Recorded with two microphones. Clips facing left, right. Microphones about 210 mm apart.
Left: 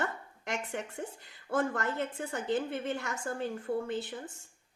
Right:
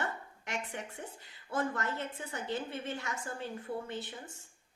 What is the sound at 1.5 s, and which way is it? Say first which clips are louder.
Speech: left 4 dB; 50° left (ahead or behind).